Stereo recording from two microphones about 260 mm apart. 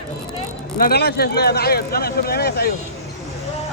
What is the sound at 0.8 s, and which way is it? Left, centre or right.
Speech, left.